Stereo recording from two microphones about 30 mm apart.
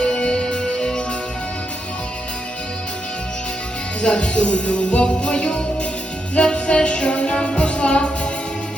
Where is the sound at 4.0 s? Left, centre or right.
Left.